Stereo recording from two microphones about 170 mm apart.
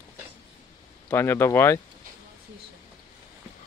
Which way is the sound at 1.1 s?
15° left (ahead or behind).